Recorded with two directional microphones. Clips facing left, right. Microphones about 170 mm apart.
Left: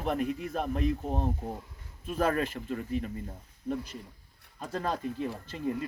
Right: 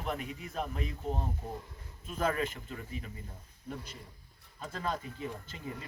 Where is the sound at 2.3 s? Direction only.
50° left (ahead or behind).